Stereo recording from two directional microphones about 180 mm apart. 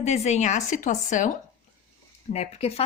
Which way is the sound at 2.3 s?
35° left (ahead or behind).